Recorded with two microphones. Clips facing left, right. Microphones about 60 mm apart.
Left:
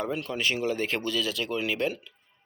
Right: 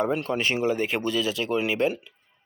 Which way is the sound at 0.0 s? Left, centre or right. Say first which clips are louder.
Right 4 dB; right.